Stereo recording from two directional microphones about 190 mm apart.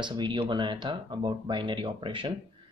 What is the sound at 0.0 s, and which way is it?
Speech, 25° right (ahead or behind).